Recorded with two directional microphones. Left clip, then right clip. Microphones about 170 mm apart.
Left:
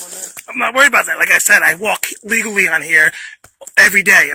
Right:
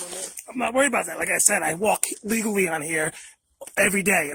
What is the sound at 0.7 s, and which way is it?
Speech, 25° right (ahead or behind).